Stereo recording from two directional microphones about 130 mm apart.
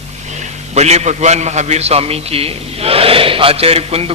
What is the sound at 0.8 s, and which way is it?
A man's voice, 55° right (ahead or behind).